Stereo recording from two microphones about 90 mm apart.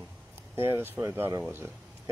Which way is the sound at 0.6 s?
25° right (ahead or behind).